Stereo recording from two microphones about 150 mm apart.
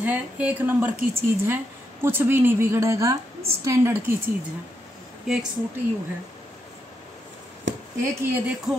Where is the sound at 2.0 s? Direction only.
15° right (ahead or behind).